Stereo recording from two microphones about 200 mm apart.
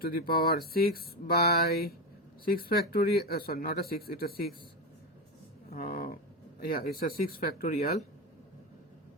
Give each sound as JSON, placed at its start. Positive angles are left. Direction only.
{"t": 0.0, "sound": "speech", "side_deg": 50}
{"t": 5.7, "sound": "speech", "side_deg": 45}